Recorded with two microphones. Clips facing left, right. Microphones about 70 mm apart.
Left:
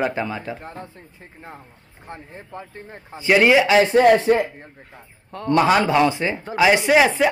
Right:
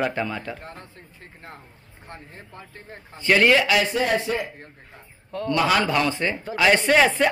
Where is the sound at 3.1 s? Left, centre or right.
Centre.